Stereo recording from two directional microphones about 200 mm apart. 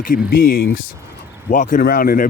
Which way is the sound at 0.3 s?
50° left (ahead or behind).